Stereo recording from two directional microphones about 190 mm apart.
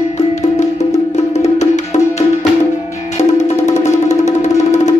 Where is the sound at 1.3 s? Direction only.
35° left (ahead or behind).